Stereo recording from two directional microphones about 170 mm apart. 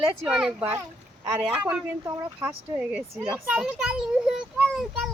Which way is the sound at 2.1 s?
15° right (ahead or behind).